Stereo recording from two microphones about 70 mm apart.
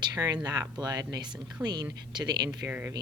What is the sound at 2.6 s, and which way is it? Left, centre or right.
Speech, right.